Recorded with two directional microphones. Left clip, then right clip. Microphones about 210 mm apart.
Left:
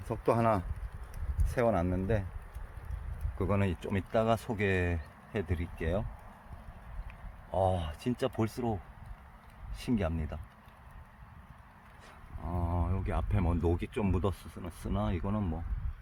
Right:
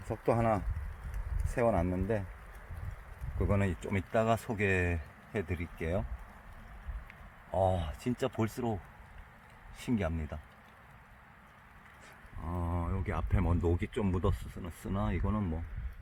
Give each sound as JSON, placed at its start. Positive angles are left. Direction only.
{"t": 0.1, "sound": "speech", "side_deg": 15}
{"t": 1.5, "sound": "speech", "side_deg": 5}
{"t": 3.3, "sound": "speech", "side_deg": 5}
{"t": 7.5, "sound": "speech", "side_deg": 5}
{"t": 7.9, "sound": "speech", "side_deg": 15}
{"t": 9.8, "sound": "speech", "side_deg": 10}
{"t": 12.4, "sound": "speech", "side_deg": 0}